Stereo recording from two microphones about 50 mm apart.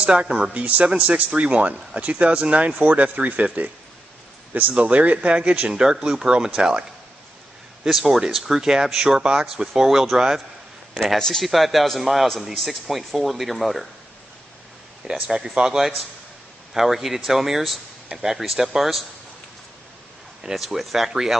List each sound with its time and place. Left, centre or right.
0.0 s speech: right
0.7 s speech: right
4.7 s speech: right
7.8 s speech: centre
11.1 s speech: centre
11.4 s a man's voice: centre
15.2 s a man's voice: centre
20.5 s a man's voice: centre